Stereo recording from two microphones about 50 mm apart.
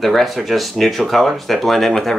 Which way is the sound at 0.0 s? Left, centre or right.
Centre.